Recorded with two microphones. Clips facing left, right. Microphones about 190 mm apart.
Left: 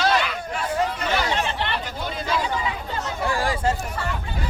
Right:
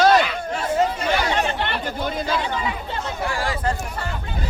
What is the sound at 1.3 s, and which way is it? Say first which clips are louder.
Chatter: right 2 dB; 50° right (ahead or behind).